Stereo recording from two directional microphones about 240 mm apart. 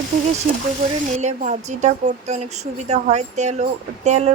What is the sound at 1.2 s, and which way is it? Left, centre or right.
Speech, right.